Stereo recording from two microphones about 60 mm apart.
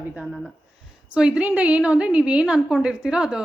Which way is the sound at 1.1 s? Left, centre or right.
Centre.